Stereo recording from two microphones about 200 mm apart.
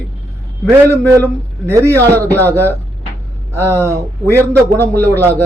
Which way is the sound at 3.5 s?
15° right (ahead or behind).